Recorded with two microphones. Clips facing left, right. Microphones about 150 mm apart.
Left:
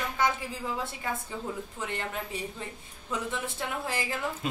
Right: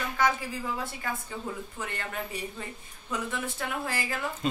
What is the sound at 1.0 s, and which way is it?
Speech, 25° left (ahead or behind).